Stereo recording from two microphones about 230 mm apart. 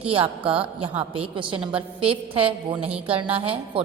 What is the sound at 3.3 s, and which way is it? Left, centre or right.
Speech, right.